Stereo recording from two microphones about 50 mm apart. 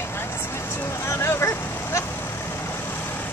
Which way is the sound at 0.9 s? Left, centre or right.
Left.